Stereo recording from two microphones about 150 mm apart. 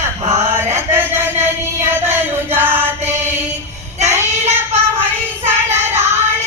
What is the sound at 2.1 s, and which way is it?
Chant, 15° right (ahead or behind).